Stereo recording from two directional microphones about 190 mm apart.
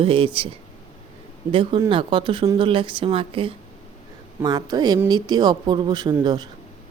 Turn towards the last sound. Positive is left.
turn(degrees=-20)  # may be behind; listen again after turning